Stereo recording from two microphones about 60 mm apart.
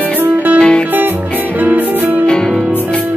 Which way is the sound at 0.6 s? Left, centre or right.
Centre.